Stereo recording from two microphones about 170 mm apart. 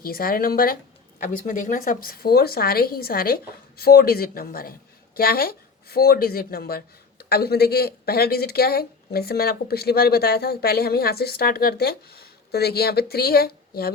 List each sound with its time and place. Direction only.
0.0 s a woman's voice: 60° left (ahead or behind)